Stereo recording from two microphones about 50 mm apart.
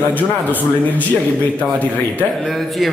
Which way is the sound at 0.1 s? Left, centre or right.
Left.